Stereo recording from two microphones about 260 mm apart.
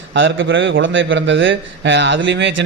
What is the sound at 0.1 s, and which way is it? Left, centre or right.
A man's voice, right.